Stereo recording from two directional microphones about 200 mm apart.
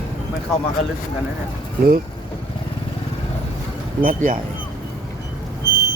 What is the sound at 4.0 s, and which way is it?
Speech, 35° right (ahead or behind).